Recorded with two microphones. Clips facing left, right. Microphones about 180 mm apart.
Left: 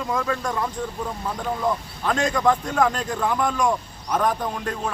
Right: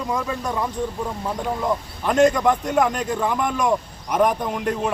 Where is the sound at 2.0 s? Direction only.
20° right (ahead or behind).